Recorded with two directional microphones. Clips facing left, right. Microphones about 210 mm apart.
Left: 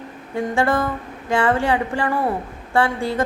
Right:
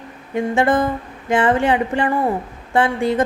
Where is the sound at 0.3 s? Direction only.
20° right (ahead or behind).